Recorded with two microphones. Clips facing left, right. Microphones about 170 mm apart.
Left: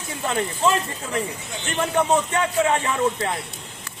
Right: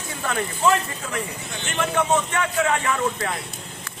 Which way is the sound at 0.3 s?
25° left (ahead or behind).